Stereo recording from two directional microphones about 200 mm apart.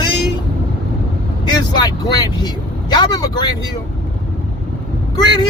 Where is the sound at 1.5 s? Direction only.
20° left (ahead or behind).